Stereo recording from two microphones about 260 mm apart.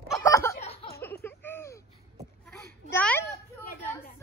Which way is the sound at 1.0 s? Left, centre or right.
Centre.